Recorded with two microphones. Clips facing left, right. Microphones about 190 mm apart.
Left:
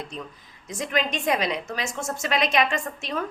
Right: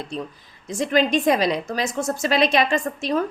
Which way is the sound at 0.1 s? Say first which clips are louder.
Right 6 dB; 30° right (ahead or behind).